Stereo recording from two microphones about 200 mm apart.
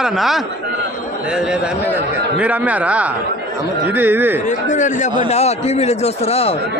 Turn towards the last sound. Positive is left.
turn(degrees=30)  # may be behind; listen again after turning